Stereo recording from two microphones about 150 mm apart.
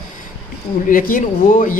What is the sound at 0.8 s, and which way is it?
Speech, 70° left (ahead or behind).